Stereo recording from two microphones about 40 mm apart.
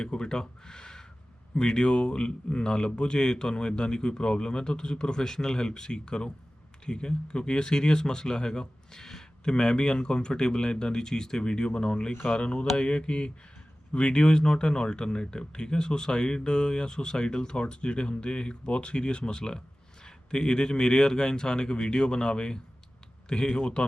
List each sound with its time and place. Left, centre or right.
0.0 s speech: centre